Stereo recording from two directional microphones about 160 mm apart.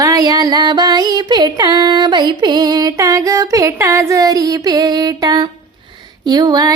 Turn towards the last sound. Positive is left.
turn(degrees=-25)  # may be behind; listen again after turning